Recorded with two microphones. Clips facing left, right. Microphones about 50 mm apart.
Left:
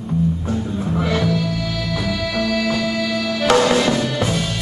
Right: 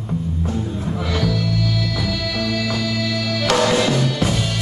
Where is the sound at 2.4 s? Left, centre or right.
Centre.